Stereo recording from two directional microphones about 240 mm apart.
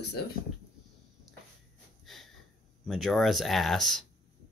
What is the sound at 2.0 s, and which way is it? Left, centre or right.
Snort, centre.